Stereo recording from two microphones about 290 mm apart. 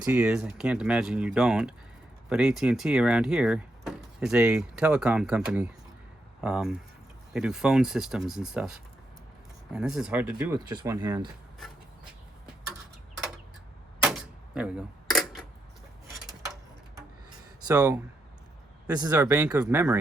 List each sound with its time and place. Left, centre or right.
0.0 s speech: centre
14.0 s typewriter: centre
17.7 s speech: centre